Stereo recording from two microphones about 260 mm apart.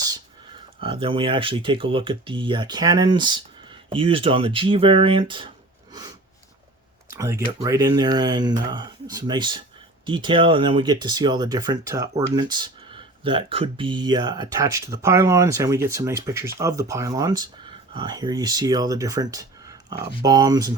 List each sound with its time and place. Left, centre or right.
0.8 s speech: centre
5.9 s a sound: centre
7.1 s speech: centre